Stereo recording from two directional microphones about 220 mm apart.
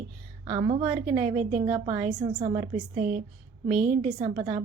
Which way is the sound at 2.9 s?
35° right (ahead or behind).